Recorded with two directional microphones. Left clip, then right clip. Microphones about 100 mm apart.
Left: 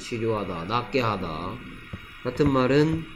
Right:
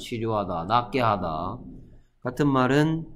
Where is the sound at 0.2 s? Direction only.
5° right (ahead or behind).